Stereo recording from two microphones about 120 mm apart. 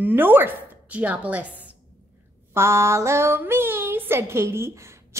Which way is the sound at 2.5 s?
20° right (ahead or behind).